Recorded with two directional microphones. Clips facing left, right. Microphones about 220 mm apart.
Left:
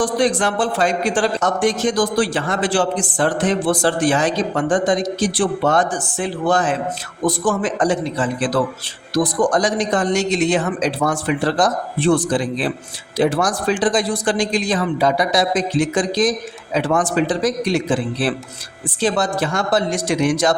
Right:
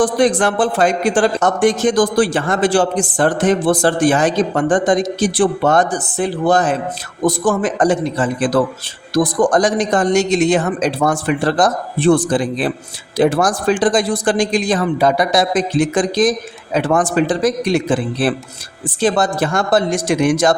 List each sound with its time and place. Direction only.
0.0 s a man's voice: 50° right (ahead or behind)